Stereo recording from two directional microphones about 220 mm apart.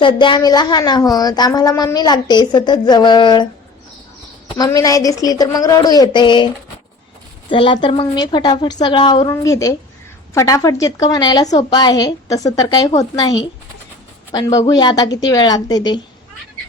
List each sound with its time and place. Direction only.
0.0 s a woman's voice: 20° left (ahead or behind)
7.5 s a woman's voice: 20° left (ahead or behind)